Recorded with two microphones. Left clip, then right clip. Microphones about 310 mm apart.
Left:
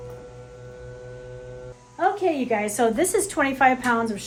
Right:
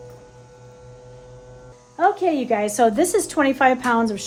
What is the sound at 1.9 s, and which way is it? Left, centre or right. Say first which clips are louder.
A woman's voice: right 4 dB; right.